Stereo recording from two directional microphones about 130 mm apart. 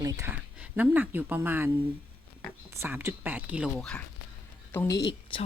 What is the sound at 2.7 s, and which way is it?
A woman's voice, 15° right (ahead or behind).